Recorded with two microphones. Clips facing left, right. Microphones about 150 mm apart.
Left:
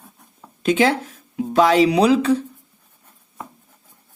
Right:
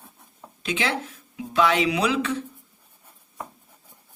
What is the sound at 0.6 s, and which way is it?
Speech, 45° left (ahead or behind).